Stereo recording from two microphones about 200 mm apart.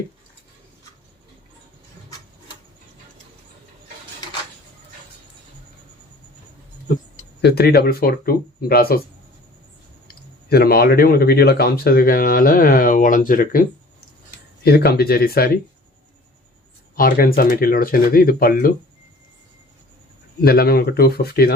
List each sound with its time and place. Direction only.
7.4 s speech: 55° left (ahead or behind)
10.1 s speech: 50° left (ahead or behind)
16.9 s speech: 45° left (ahead or behind)
20.4 s speech: 50° left (ahead or behind)